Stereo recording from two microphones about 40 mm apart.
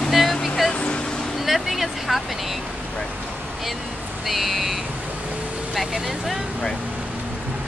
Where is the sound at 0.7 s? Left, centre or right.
Left.